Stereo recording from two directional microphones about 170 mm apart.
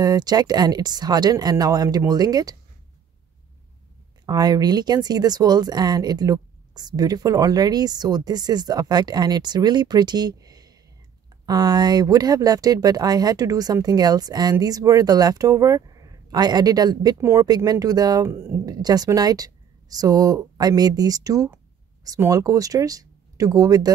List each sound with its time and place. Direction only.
0.0 s speech: 20° right (ahead or behind)
4.3 s speech: 25° right (ahead or behind)